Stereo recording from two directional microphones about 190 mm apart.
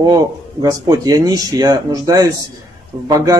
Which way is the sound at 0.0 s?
20° right (ahead or behind).